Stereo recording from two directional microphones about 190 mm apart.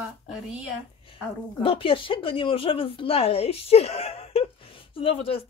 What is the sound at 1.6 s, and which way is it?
A woman's voice, 30° left (ahead or behind).